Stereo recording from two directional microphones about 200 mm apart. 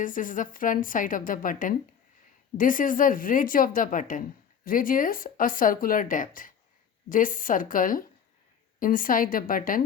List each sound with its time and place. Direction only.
0.0 s speech: 40° left (ahead or behind)